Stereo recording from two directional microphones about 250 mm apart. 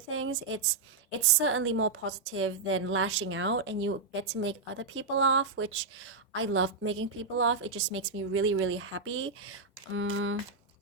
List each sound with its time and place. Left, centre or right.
0.1 s a woman's voice: right